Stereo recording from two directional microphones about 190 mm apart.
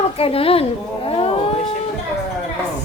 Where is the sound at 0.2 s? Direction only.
30° left (ahead or behind).